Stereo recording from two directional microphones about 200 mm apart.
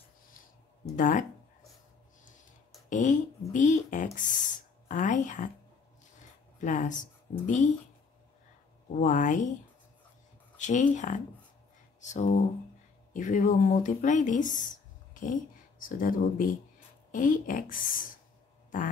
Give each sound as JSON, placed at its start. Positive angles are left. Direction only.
{"t": 0.8, "sound": "speech", "side_deg": 40}
{"t": 2.9, "sound": "speech", "side_deg": 40}
{"t": 6.1, "sound": "a sound", "side_deg": 35}
{"t": 7.4, "sound": "speech", "side_deg": 35}
{"t": 9.0, "sound": "speech", "side_deg": 40}
{"t": 10.6, "sound": "speech", "side_deg": 40}